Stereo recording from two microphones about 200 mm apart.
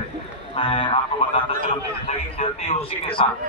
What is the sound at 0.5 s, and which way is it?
Speech, 25° left (ahead or behind).